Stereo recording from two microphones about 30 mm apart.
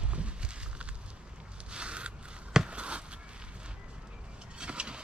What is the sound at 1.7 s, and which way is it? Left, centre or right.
Scissors, right.